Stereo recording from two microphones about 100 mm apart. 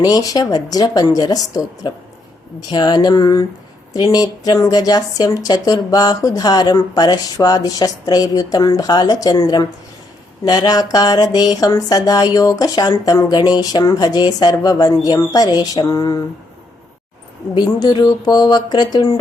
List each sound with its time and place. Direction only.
0.0 s speech: 40° left (ahead or behind)
17.5 s speech: 45° left (ahead or behind)